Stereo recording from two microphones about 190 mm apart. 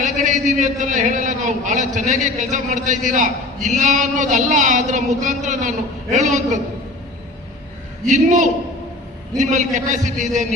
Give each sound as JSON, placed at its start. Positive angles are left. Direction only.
{"t": 0.0, "sound": "a man's voice", "side_deg": -40}
{"t": 8.0, "sound": "a man's voice", "side_deg": -40}